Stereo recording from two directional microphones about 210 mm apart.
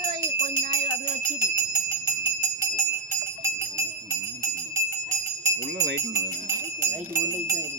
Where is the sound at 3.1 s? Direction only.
15° right (ahead or behind).